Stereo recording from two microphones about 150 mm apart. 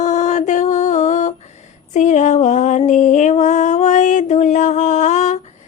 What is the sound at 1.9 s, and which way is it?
Music, 55° left (ahead or behind).